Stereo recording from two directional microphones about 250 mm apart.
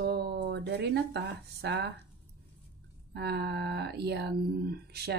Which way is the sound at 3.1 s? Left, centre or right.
Right.